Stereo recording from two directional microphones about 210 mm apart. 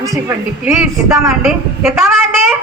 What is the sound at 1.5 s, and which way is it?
Speech, 5° right (ahead or behind).